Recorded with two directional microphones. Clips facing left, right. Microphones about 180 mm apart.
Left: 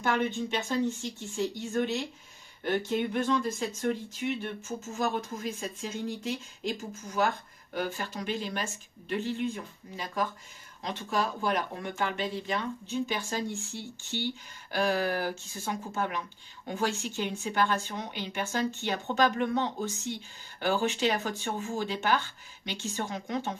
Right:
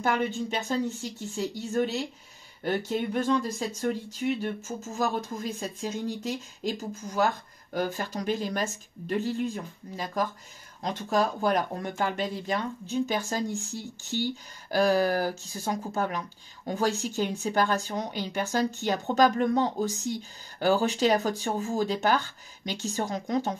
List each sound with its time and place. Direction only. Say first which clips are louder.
0.0 s speech: right 1 dB; 40° right (ahead or behind)
7.7 s speech: right 4 dB; 40° right (ahead or behind)
10.8 s speech: right 4 dB; 40° right (ahead or behind)